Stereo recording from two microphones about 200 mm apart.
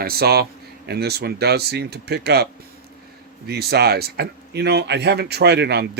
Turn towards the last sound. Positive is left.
turn(degrees=-55)  # may be behind; listen again after turning